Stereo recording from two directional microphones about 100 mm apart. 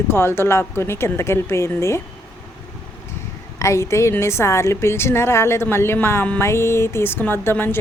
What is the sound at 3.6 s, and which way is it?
A woman's voice, 30° left (ahead or behind).